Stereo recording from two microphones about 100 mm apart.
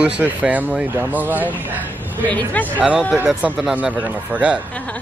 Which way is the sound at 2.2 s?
15° left (ahead or behind).